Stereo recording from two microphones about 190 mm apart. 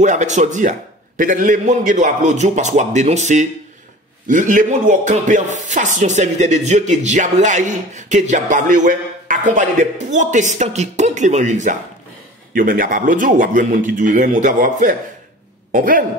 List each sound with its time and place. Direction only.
0.0 s speech: 40° right (ahead or behind)